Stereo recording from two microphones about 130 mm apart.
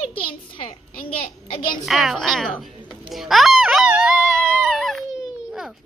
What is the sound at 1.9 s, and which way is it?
Speech, centre (ahead or behind).